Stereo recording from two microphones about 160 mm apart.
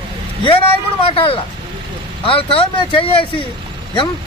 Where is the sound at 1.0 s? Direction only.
35° left (ahead or behind).